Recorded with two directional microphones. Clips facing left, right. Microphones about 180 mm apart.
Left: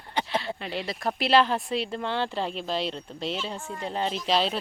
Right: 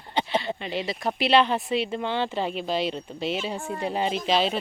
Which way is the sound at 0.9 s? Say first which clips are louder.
Right 1 dB; centre (ahead or behind).